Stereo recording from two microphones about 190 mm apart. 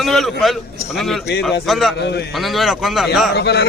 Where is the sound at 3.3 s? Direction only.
55° left (ahead or behind).